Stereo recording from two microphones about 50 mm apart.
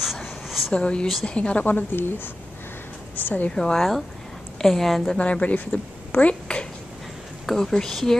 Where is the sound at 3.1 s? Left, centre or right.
Left.